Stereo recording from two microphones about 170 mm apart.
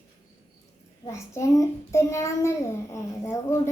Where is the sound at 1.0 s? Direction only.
15° left (ahead or behind).